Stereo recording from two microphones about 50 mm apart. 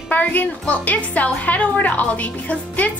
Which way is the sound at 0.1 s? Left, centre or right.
Left.